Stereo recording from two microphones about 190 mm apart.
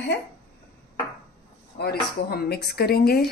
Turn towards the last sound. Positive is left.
turn(degrees=55)  # may be behind; listen again after turning